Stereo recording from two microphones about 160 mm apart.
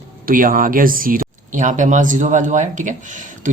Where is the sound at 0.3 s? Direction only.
60° right (ahead or behind).